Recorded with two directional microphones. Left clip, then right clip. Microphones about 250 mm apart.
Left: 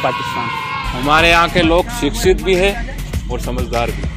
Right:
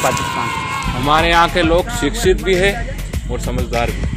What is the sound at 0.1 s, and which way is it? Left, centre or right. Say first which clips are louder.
Speech: right 1 dB; centre.